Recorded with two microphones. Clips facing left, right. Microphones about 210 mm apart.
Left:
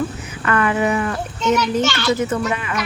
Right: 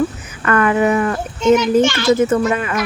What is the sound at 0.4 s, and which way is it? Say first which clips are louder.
Speech: right 4 dB; 45° right (ahead or behind).